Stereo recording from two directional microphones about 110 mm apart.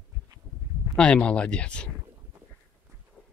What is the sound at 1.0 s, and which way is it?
Speech, 10° left (ahead or behind).